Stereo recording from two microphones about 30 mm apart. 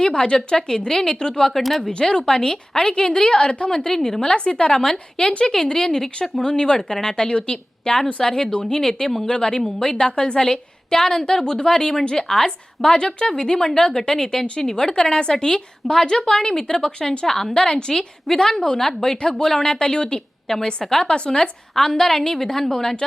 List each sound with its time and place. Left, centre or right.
0.2 s a woman's voice: left
1.5 s speech: centre
1.9 s a woman's voice: left
4.2 s a woman's voice: left; by 6.1 s centre
6.4 s a woman's voice: left
7.9 s a woman's voice: centre
9.2 s a woman's voice: left
10.9 s a woman's voice: centre
16.1 s a woman's voice: centre
17.5 s a woman's voice: left
17.9 s a woman's voice: centre
19.1 s a woman's voice: left
21.8 s a woman's voice: centre